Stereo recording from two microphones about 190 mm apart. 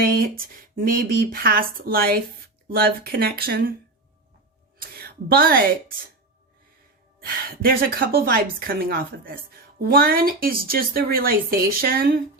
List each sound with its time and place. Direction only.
0.0 s a woman's voice: 50° right (ahead or behind)
4.9 s a woman's voice: 55° right (ahead or behind)
7.2 s a woman's voice: 50° right (ahead or behind)